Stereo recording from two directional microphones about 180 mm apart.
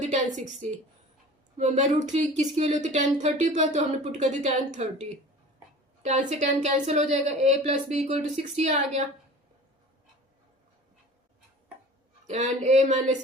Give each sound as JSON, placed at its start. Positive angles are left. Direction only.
{"t": 0.0, "sound": "a woman's voice", "side_deg": -40}
{"t": 6.0, "sound": "speech", "side_deg": -35}
{"t": 12.3, "sound": "speech", "side_deg": -40}